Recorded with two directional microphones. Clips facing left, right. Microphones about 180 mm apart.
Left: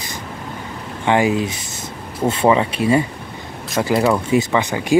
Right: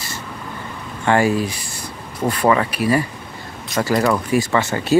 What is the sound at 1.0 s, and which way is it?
Speech, 15° left (ahead or behind).